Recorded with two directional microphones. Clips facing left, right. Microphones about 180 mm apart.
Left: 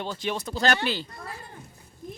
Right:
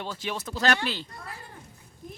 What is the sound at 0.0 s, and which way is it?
Speech, 5° right (ahead or behind).